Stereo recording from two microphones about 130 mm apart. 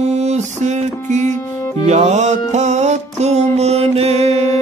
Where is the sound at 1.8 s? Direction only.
60° right (ahead or behind).